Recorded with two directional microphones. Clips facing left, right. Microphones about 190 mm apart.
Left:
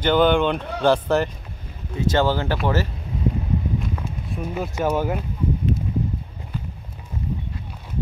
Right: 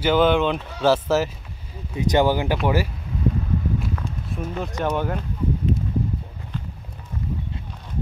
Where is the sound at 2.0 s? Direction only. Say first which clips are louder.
Right 1 dB; 15° right (ahead or behind).